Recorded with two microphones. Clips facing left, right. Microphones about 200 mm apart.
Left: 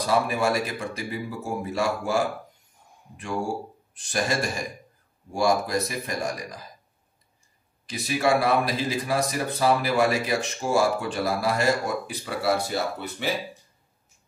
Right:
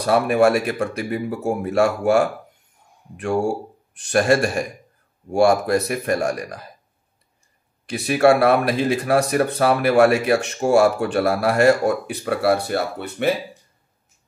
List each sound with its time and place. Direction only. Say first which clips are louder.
0.0 s speech: right 7 dB; 65° right (ahead or behind)
7.8 s speech: right 8 dB; 65° right (ahead or behind)